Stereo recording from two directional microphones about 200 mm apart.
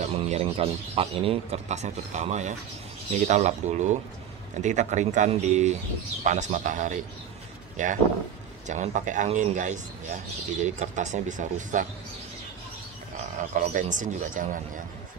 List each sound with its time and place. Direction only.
0.0 s speech: 30° right (ahead or behind)
13.6 s speech: 40° right (ahead or behind)